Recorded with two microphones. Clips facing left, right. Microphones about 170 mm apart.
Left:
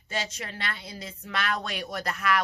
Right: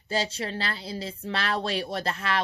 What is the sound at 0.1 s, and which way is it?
A woman's voice, 30° right (ahead or behind).